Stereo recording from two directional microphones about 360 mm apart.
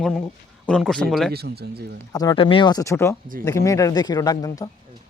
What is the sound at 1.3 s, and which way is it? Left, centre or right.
Speech, right.